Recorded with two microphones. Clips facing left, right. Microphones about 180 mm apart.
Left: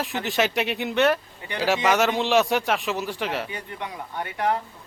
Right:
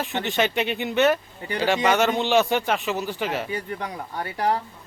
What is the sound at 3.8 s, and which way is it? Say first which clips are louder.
Speech: right 1 dB; 35° right (ahead or behind).